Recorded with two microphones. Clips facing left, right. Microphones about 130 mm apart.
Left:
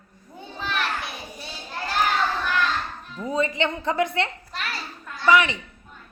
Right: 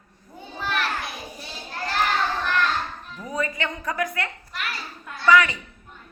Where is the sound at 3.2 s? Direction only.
25° left (ahead or behind).